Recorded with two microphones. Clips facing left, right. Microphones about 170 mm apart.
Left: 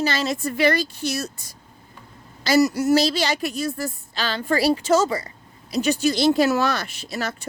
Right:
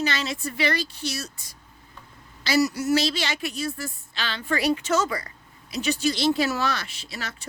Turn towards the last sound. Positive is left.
turn(degrees=45)  # may be behind; listen again after turning